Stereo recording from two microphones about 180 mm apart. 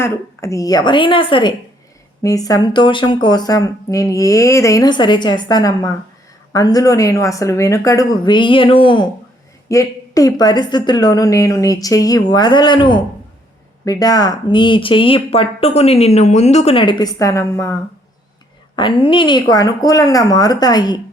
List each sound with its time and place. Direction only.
0.0 s speech: 15° left (ahead or behind)
9.6 s speech: 20° left (ahead or behind)
18.8 s speech: 30° left (ahead or behind)